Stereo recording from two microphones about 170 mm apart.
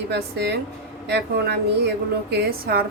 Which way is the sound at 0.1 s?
75° right (ahead or behind).